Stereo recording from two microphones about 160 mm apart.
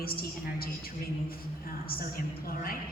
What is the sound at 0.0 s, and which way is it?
Speech, 70° left (ahead or behind).